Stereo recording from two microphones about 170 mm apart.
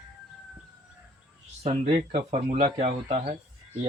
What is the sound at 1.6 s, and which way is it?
Speech, 30° right (ahead or behind).